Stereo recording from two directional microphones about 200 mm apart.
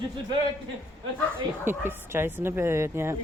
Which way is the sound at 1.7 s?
10° right (ahead or behind).